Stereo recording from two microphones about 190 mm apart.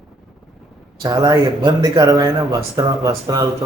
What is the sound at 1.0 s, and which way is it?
Speech, 20° right (ahead or behind).